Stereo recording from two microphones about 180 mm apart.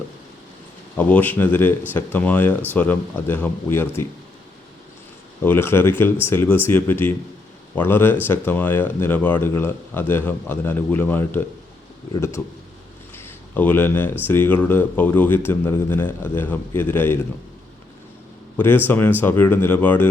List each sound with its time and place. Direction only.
0.9 s speech: 10° left (ahead or behind)
5.4 s speech: 10° left (ahead or behind)
13.1 s a sound: 10° left (ahead or behind)
14.3 s speech: 10° left (ahead or behind)
18.5 s speech: 10° left (ahead or behind)